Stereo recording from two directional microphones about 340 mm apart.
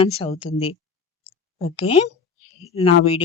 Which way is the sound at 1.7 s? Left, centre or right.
Centre.